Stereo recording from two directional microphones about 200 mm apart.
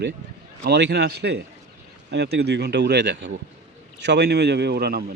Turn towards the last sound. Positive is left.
turn(degrees=-55)  # may be behind; listen again after turning